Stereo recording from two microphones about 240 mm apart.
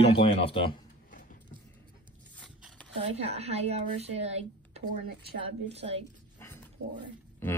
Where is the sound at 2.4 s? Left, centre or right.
Centre.